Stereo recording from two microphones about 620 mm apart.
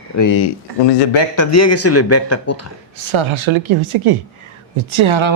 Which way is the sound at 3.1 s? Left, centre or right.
Right.